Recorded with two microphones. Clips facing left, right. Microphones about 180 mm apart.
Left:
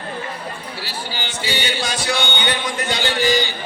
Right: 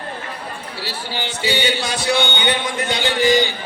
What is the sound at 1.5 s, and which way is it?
Speech, 20° right (ahead or behind).